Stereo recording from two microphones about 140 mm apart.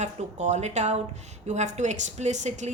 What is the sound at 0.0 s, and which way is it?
A woman's voice, 55° right (ahead or behind).